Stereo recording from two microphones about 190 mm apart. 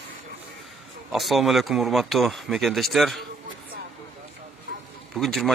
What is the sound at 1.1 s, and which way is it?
Speech, centre (ahead or behind).